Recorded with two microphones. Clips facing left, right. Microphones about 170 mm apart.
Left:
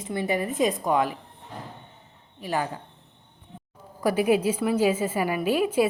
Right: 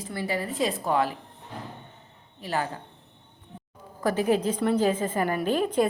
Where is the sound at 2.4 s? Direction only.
15° left (ahead or behind).